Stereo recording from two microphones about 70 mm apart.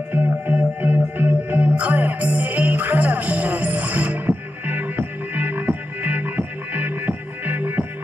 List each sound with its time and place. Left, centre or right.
0.1 s music: right